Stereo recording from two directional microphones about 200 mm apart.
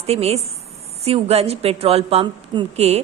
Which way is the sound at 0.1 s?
30° right (ahead or behind).